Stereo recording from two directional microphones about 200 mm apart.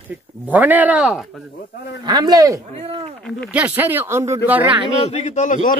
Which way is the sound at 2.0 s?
20° right (ahead or behind).